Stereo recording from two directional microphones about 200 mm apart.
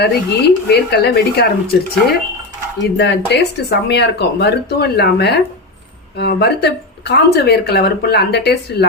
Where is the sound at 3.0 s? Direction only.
60° left (ahead or behind).